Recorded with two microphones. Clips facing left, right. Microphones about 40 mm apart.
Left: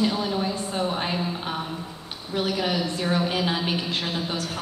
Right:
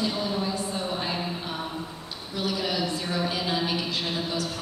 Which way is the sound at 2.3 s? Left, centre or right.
Left.